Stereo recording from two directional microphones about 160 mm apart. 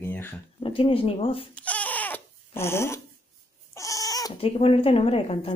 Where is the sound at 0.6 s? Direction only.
35° left (ahead or behind).